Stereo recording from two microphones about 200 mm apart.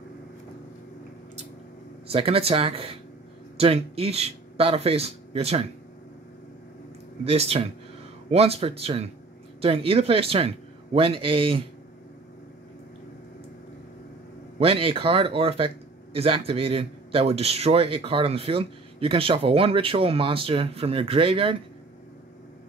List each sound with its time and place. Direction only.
2.0 s speech: 30° right (ahead or behind)
7.2 s speech: 30° right (ahead or behind)
14.6 s speech: 30° right (ahead or behind)